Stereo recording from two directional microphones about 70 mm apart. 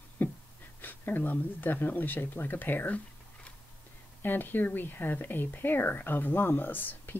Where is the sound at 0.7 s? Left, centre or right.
Left.